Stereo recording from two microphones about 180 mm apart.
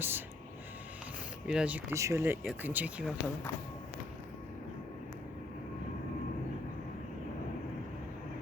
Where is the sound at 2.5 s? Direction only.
10° right (ahead or behind).